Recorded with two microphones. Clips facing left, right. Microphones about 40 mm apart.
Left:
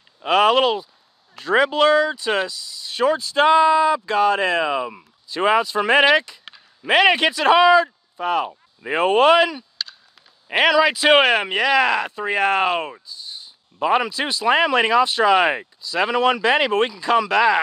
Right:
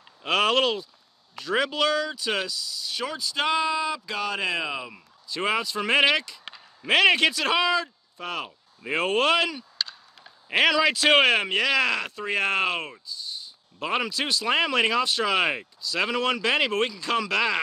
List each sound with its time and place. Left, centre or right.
0.2 s speech: centre; by 4.6 s left
4.6 s speech: centre